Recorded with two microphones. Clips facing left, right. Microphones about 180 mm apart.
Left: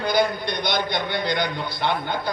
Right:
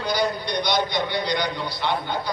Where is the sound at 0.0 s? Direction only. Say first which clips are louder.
Left 3 dB; 55° left (ahead or behind).